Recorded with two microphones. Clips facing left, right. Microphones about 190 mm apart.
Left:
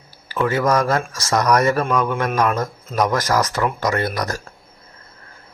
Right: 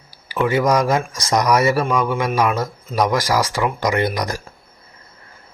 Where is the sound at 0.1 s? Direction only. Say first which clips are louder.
Right 2 dB; 15° right (ahead or behind).